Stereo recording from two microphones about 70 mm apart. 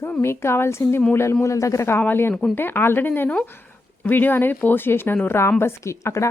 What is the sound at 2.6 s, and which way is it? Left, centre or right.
A woman's voice, left.